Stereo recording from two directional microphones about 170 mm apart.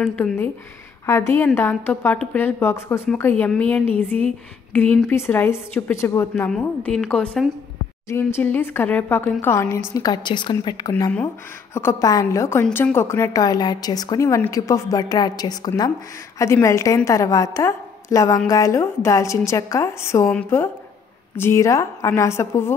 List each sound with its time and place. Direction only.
1.0 s a woman's voice: 15° left (ahead or behind)
8.1 s a woman's voice: 15° left (ahead or behind)